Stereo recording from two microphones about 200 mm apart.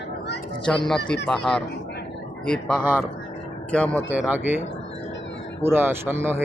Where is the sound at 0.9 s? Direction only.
Centre (ahead or behind).